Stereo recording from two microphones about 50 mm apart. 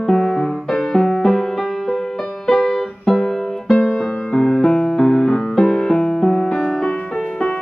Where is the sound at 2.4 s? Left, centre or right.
Centre.